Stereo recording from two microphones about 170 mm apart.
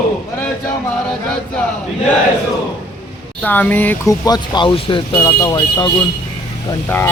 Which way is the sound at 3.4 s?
10° left (ahead or behind).